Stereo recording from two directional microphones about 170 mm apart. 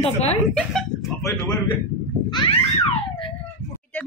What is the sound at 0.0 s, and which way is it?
Speech, 40° left (ahead or behind).